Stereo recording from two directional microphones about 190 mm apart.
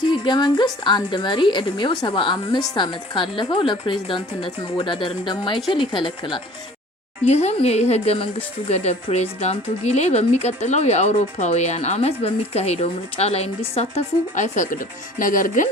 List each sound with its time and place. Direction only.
0.1 s a woman's voice: 25° left (ahead or behind); by 15.7 s 45° left (ahead or behind)